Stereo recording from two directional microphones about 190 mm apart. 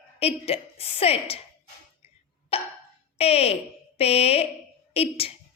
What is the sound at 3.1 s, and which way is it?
A woman's voice, 30° left (ahead or behind).